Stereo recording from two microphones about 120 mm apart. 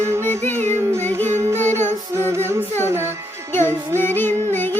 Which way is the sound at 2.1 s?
20° right (ahead or behind).